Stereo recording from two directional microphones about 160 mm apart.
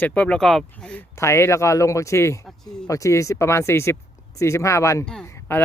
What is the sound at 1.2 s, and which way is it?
Speech, 15° left (ahead or behind).